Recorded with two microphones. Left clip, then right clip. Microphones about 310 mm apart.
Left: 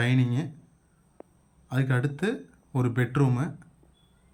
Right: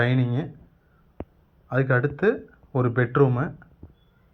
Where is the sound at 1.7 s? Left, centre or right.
Centre.